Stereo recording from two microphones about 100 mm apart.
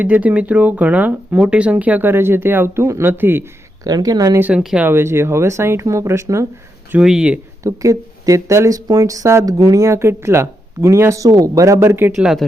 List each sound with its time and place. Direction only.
0.0 s speech: 15° right (ahead or behind)
3.8 s speech: 40° right (ahead or behind)
4.4 s speech: 15° right (ahead or behind)
7.0 s speech: 5° right (ahead or behind)
7.6 s speech: 35° right (ahead or behind)
12.1 s speech: 5° right (ahead or behind)